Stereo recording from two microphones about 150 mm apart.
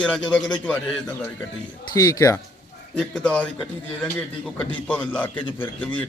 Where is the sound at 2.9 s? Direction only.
5° left (ahead or behind).